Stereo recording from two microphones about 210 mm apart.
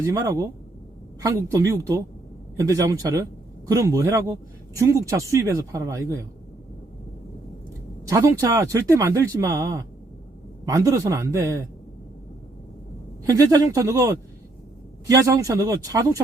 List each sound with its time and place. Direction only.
0.0 s speech: 15° right (ahead or behind)
8.0 s speech: 15° right (ahead or behind)
13.2 s speech: 15° right (ahead or behind)